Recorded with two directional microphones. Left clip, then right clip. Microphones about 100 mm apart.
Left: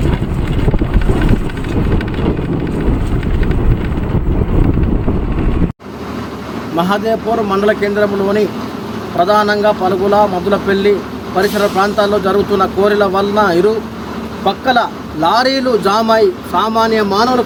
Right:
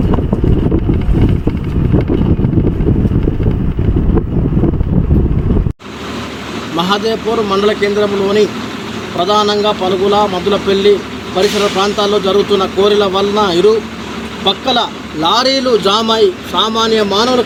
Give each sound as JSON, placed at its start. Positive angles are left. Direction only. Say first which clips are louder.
{"t": 6.7, "sound": "speech", "louder": "even", "side_deg": 20}